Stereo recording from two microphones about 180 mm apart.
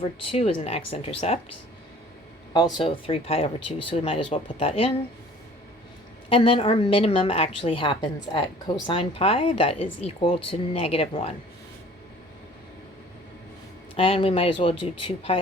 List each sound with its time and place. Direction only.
0.0 s a woman's voice: 30° left (ahead or behind)
2.5 s a woman's voice: 25° left (ahead or behind)
6.2 s a woman's voice: 30° left (ahead or behind)
13.9 s a woman's voice: 30° left (ahead or behind)